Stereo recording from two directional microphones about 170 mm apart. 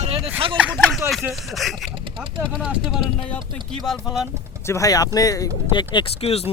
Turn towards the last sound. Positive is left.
turn(degrees=35)  # may be behind; listen again after turning